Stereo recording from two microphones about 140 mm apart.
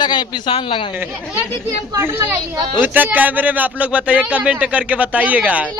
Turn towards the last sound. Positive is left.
turn(degrees=-10)  # may be behind; listen again after turning